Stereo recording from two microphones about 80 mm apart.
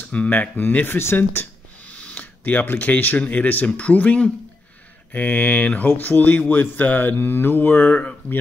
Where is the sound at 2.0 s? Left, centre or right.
Centre.